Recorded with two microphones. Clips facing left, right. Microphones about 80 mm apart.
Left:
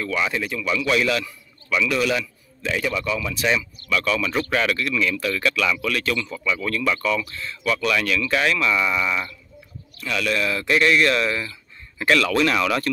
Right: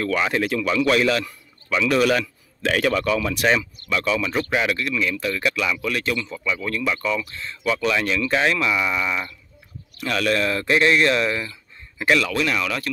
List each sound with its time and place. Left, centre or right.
0.0 s a man's voice: right
2.6 s a man's voice: right
2.9 s speech: right
3.9 s speech: right
8.6 s speech: centre
10.0 s speech: right; by 12.4 s centre
12.4 s speech: centre